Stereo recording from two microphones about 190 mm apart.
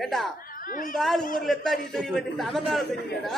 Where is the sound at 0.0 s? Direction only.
Centre (ahead or behind).